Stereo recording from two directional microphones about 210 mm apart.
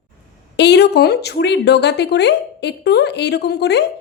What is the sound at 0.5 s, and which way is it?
A woman's voice, 55° left (ahead or behind).